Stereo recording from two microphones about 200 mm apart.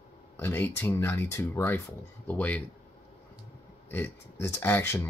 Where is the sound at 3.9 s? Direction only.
10° left (ahead or behind).